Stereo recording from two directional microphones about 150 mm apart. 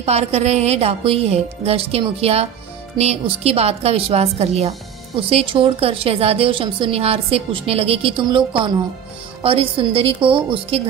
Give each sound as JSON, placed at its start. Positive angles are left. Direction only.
{"t": 0.0, "sound": "a woman's voice", "side_deg": -45}